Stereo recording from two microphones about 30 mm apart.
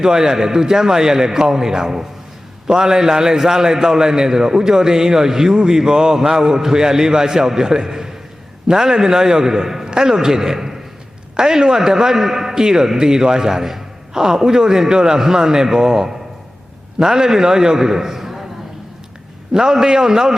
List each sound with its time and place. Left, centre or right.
0.0 s a man's voice: centre
9.8 s a man's voice: right
19.7 s a man's voice: right